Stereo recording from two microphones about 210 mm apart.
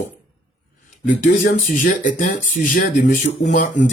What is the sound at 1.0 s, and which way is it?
Speech, 40° left (ahead or behind).